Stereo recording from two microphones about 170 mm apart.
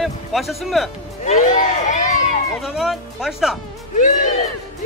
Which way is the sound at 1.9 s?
50° left (ahead or behind).